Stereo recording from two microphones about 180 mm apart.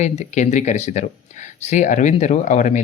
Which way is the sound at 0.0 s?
40° left (ahead or behind).